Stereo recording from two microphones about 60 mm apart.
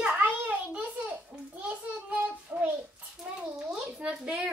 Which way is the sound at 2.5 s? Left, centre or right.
Right.